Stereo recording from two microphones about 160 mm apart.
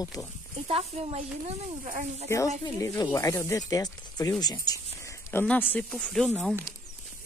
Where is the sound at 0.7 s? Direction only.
40° right (ahead or behind).